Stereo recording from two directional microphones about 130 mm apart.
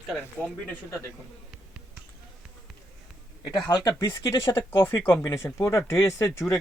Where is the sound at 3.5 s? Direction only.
30° left (ahead or behind).